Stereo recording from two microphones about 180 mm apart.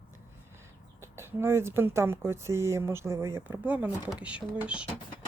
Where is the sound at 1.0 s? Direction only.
15° right (ahead or behind).